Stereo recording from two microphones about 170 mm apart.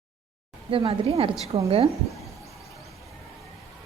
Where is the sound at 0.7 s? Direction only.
35° right (ahead or behind).